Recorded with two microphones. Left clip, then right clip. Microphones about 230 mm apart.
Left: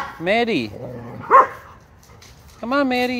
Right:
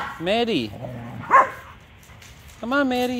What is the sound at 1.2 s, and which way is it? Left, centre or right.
Dog, right.